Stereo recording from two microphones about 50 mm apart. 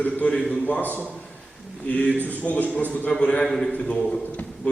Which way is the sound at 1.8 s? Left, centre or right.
Left.